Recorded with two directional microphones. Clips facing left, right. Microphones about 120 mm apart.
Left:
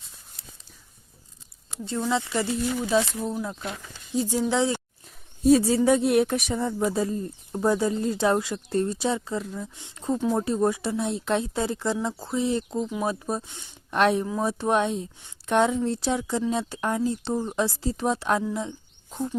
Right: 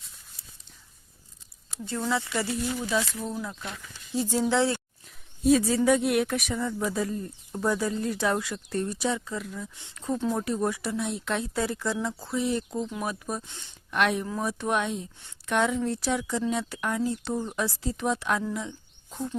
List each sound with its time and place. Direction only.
1.8 s speech: 20° left (ahead or behind)
5.5 s speech: 30° left (ahead or behind)
9.7 s speech: 15° left (ahead or behind)
10.3 s speech: 30° left (ahead or behind)
14.3 s speech: 20° left (ahead or behind)
14.6 s speech: 30° left (ahead or behind)
19.1 s speech: 10° left (ahead or behind)